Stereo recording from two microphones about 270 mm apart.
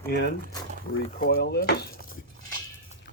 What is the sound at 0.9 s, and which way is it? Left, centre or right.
Speech, left.